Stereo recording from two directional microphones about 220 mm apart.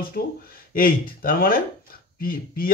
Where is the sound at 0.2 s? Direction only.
45° left (ahead or behind).